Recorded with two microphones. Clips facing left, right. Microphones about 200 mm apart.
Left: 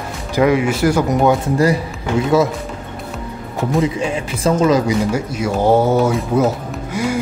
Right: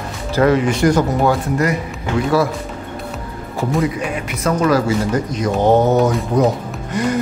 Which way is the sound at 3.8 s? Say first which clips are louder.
Left 2 dB; 25° left (ahead or behind).